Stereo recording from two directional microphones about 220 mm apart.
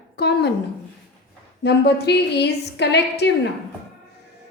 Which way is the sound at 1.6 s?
50° left (ahead or behind).